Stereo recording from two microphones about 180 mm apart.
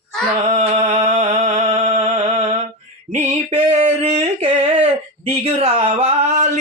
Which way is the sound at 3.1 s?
35° right (ahead or behind).